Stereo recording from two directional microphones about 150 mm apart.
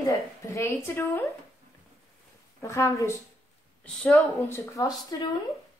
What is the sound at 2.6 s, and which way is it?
Speech, 20° left (ahead or behind).